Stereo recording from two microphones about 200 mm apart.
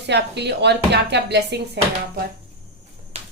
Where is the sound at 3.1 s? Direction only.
30° right (ahead or behind).